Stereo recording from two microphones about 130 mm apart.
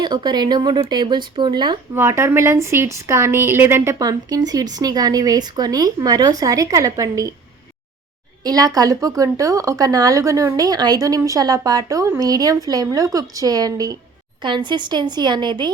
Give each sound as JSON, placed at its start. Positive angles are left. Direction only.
{"t": 0.0, "sound": "a woman's voice", "side_deg": -35}
{"t": 2.0, "sound": "a woman's voice", "side_deg": -20}
{"t": 8.4, "sound": "a woman's voice", "side_deg": -30}